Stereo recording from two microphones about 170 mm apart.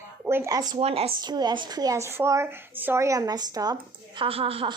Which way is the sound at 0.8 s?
35° right (ahead or behind).